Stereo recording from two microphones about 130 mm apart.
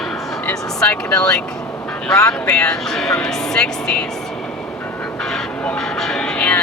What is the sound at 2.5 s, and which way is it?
Speech, 5° left (ahead or behind).